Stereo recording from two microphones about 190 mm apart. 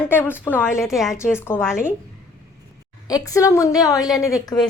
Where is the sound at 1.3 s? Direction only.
10° left (ahead or behind).